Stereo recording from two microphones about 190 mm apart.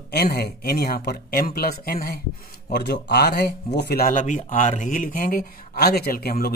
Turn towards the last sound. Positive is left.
turn(degrees=55)  # may be behind; listen again after turning